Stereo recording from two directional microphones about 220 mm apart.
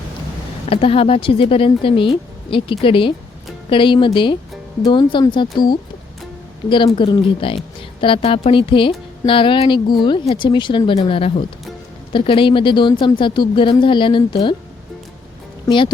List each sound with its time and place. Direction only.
0.7 s speech: 25° left (ahead or behind)
15.6 s speech: 20° left (ahead or behind)